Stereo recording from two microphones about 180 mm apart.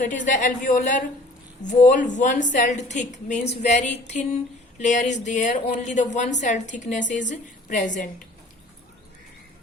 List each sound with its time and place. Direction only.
0.0 s a woman's voice: 45° left (ahead or behind)